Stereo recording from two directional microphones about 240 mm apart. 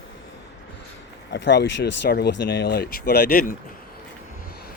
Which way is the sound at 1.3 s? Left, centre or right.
Left.